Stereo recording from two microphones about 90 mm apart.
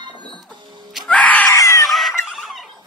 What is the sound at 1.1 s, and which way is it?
Screaming, 15° left (ahead or behind).